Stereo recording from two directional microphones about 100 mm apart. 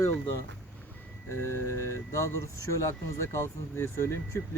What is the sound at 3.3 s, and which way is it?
Speech, 25° left (ahead or behind).